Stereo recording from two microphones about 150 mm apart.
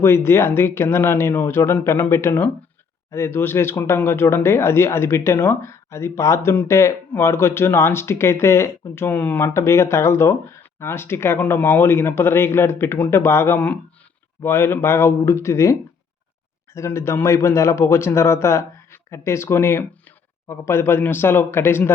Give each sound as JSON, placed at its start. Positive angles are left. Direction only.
{"t": 0.0, "sound": "speech", "side_deg": 15}
{"t": 16.7, "sound": "speech", "side_deg": 20}